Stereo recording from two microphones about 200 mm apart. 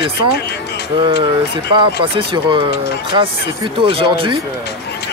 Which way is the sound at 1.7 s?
25° right (ahead or behind).